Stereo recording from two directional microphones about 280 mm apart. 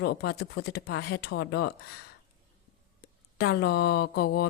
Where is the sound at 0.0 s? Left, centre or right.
Left.